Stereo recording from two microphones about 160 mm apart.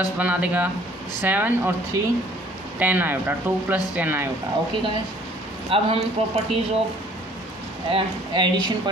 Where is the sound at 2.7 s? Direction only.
10° right (ahead or behind).